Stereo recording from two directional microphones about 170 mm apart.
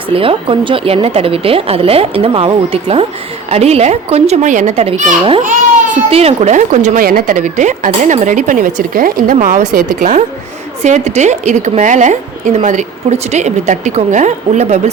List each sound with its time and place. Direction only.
0.1 s speech: 30° right (ahead or behind)
5.4 s a sound: 50° right (ahead or behind)
6.1 s speech: 35° right (ahead or behind)